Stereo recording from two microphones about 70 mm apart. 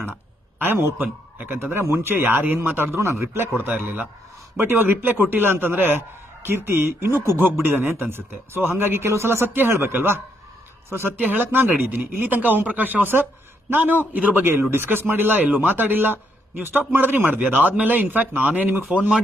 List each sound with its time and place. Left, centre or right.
0.6 s a man's voice: right